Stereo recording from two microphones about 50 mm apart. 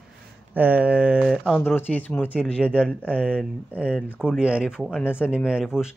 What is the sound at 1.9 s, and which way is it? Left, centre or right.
Speech, left.